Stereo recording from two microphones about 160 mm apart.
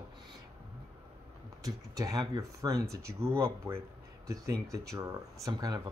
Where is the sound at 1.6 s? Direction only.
20° right (ahead or behind).